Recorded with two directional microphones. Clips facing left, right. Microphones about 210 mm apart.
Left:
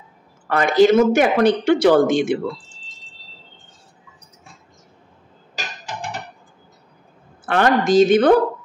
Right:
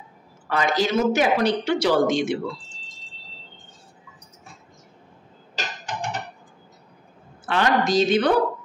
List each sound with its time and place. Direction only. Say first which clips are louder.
0.5 s speech: left 9 dB; 55° left (ahead or behind)
7.4 s speech: left 4 dB; 55° left (ahead or behind)